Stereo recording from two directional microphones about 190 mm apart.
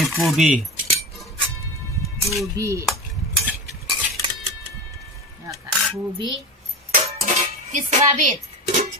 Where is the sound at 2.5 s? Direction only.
15° right (ahead or behind).